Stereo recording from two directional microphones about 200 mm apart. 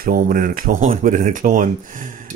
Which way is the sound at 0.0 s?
45° right (ahead or behind).